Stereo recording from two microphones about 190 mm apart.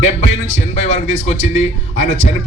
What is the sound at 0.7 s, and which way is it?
A man's voice, 35° left (ahead or behind).